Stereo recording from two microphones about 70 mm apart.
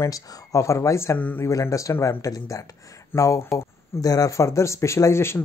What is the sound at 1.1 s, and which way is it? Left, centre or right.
Speech, left.